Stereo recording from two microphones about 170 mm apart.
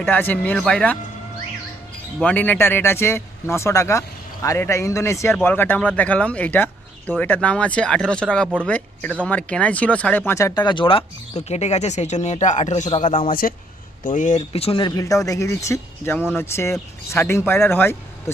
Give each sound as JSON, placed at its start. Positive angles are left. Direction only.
{"t": 0.0, "sound": "speech", "side_deg": 10}
{"t": 2.1, "sound": "speech", "side_deg": 10}
{"t": 14.0, "sound": "speech", "side_deg": 50}